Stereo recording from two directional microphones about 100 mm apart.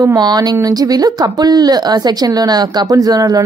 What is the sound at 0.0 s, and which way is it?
Speech, 40° right (ahead or behind).